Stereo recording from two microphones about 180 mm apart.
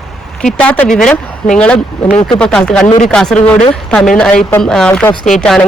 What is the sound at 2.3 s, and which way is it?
A woman's voice, 5° left (ahead or behind).